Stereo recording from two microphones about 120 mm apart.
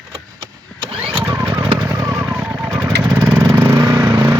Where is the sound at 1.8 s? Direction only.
25° right (ahead or behind).